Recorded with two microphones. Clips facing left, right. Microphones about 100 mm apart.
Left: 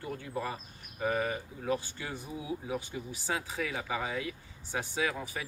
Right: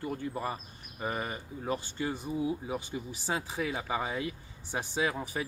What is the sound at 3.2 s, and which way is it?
Speech, 25° right (ahead or behind).